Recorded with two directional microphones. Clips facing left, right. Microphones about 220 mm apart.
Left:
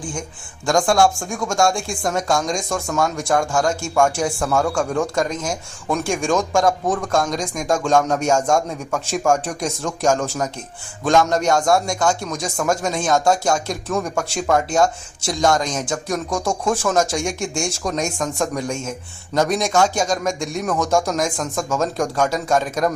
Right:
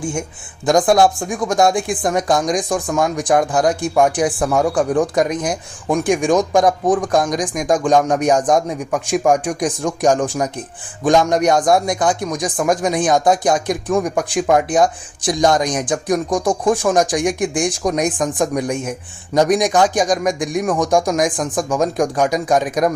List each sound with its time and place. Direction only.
0.0 s a man's voice: 25° right (ahead or behind)